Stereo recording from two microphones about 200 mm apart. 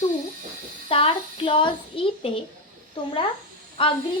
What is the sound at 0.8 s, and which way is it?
Speech, 30° left (ahead or behind).